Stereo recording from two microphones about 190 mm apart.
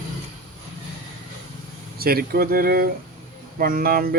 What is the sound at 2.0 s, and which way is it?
Speech, 50° right (ahead or behind).